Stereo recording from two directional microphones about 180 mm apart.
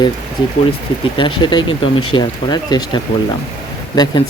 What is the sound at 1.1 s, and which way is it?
Speech, 25° left (ahead or behind).